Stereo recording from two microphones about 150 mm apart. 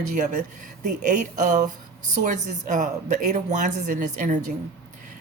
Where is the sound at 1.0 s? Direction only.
60° right (ahead or behind).